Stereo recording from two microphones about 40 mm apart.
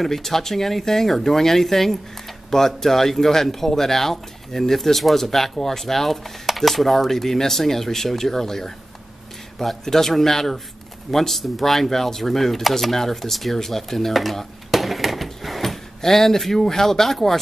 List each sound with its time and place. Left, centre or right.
0.0 s speech: centre